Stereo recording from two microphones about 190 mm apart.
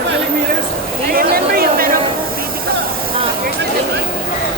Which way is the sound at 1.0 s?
50° right (ahead or behind).